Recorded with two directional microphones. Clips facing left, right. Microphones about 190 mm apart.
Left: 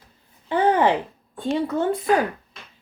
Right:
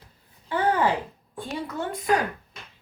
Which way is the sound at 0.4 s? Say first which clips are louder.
Left 5 dB; 20° left (ahead or behind).